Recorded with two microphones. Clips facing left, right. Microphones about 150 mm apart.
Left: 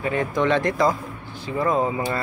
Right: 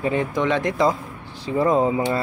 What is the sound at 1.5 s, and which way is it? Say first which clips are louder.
Speech: right 3 dB; 30° right (ahead or behind).